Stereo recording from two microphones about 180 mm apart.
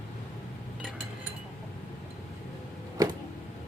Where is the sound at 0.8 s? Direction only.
5° right (ahead or behind).